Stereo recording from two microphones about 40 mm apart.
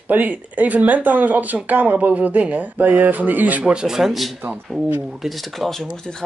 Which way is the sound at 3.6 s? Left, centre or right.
Centre.